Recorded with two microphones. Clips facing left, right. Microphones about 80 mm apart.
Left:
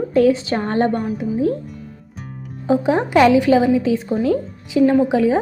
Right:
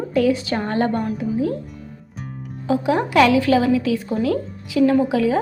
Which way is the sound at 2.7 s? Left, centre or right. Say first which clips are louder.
Left 3 dB; left.